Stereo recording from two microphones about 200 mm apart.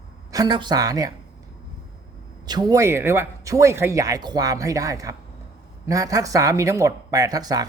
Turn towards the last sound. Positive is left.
turn(degrees=-20)  # may be behind; listen again after turning